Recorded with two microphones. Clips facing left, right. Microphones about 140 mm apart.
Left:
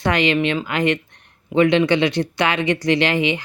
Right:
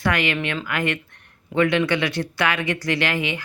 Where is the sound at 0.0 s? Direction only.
20° left (ahead or behind).